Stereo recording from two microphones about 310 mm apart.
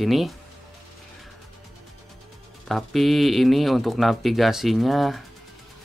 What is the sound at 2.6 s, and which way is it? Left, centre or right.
Speech, centre.